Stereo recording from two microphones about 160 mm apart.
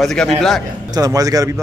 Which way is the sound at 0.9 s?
25° right (ahead or behind).